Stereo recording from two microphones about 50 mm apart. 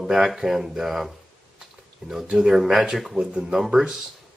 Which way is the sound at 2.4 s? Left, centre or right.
Centre.